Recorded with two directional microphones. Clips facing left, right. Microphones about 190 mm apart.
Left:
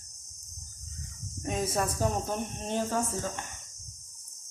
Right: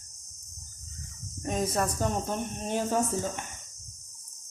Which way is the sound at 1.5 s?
Centre (ahead or behind).